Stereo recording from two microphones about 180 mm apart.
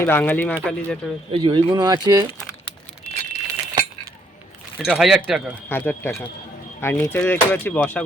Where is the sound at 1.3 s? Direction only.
25° right (ahead or behind).